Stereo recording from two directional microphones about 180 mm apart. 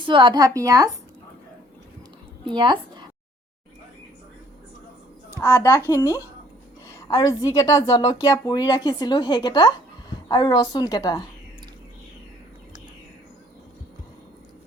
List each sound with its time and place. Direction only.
0.0 s a woman's voice: 25° right (ahead or behind)
2.5 s a woman's voice: 25° right (ahead or behind)
5.4 s a child's voice: 10° left (ahead or behind)